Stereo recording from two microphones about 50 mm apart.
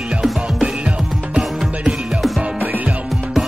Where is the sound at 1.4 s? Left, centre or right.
Centre.